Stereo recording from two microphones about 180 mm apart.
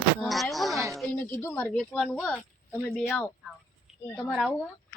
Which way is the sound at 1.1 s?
10° left (ahead or behind).